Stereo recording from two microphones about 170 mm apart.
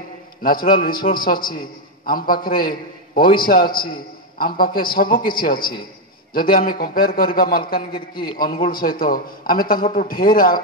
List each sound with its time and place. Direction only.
0.4 s a man's voice: 55° left (ahead or behind)